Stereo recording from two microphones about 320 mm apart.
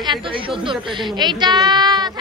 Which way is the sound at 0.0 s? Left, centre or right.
Centre.